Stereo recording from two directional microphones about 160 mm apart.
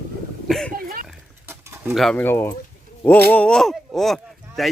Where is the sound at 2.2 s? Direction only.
15° left (ahead or behind).